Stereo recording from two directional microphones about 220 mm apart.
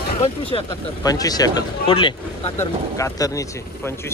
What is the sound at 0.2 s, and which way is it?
Speech, 25° left (ahead or behind).